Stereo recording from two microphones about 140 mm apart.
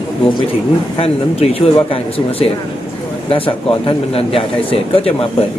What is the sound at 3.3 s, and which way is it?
A man's voice, 40° left (ahead or behind).